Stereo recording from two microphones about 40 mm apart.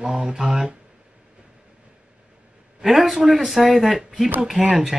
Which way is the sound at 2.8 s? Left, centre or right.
Centre.